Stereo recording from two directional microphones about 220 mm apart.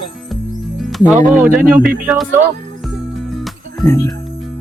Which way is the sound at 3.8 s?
10° left (ahead or behind).